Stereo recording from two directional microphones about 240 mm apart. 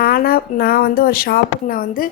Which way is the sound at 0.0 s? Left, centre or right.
Left.